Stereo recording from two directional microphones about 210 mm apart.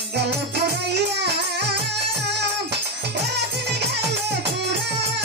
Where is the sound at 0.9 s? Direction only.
55° right (ahead or behind).